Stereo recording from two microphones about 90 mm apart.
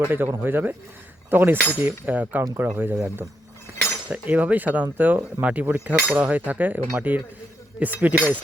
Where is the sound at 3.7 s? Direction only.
20° right (ahead or behind).